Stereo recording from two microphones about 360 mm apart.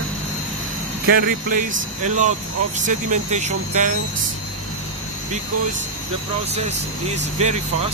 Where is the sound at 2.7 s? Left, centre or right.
Centre.